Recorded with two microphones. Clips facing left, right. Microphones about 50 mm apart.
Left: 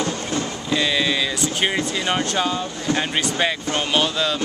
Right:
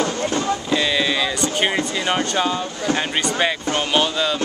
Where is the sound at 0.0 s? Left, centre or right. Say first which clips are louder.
Right 3 dB; right.